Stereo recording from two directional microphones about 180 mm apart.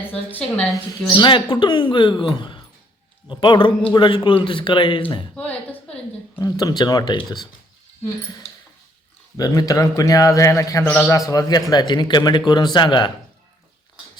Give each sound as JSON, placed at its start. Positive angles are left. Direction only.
{"t": 0.1, "sound": "speech", "side_deg": 10}
{"t": 1.1, "sound": "a man's voice", "side_deg": 25}
{"t": 5.3, "sound": "a sound", "side_deg": 5}
{"t": 6.4, "sound": "a man's voice", "side_deg": 20}
{"t": 9.4, "sound": "a man's voice", "side_deg": 20}